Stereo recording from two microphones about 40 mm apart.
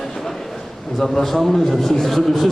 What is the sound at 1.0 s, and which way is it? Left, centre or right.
A man's voice, centre.